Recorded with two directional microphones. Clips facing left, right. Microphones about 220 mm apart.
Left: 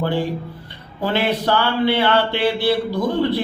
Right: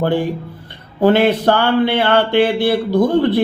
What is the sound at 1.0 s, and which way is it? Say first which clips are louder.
Speech: right 8 dB; 50° right (ahead or behind).